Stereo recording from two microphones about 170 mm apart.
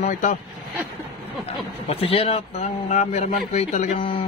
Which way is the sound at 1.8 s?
35° left (ahead or behind).